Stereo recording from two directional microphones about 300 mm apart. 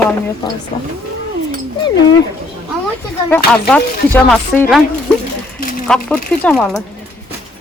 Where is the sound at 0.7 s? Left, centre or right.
Centre.